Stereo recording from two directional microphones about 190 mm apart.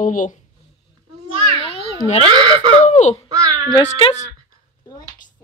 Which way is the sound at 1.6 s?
30° left (ahead or behind).